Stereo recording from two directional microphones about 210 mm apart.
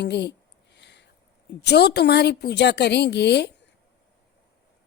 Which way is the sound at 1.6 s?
55° left (ahead or behind).